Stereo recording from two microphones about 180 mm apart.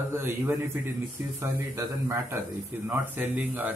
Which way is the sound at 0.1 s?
10° right (ahead or behind).